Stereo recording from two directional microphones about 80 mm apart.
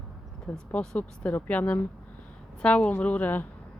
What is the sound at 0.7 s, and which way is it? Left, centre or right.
A woman's voice, centre.